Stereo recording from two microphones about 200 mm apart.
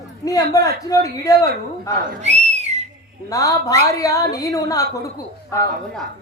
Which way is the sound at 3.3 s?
15° left (ahead or behind).